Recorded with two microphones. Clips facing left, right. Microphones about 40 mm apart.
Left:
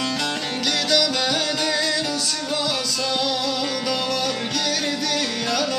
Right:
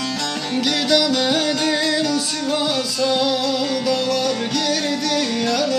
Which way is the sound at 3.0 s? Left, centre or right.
Centre.